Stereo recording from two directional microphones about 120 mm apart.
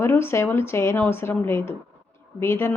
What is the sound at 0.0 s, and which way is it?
A woman's voice, 20° left (ahead or behind).